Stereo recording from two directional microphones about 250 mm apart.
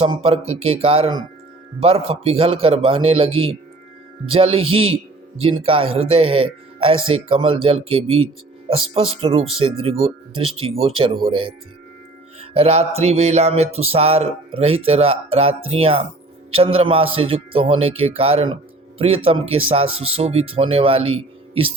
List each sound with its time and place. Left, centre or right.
0.0 s music: right